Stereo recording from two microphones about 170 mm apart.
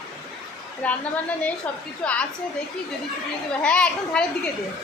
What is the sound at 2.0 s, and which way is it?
Speech, 5° left (ahead or behind).